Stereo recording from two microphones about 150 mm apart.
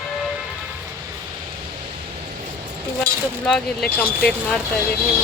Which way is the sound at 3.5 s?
5° left (ahead or behind).